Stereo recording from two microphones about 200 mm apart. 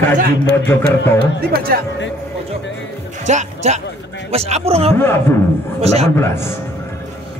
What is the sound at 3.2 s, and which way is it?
A man's voice, 35° right (ahead or behind).